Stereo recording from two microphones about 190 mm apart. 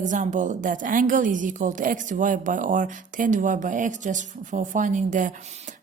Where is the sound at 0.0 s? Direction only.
40° right (ahead or behind).